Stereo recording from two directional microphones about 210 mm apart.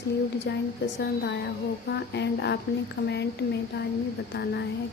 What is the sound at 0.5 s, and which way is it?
A woman's voice, 55° left (ahead or behind).